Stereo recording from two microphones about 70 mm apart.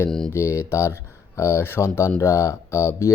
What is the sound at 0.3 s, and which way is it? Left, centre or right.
Speech, left.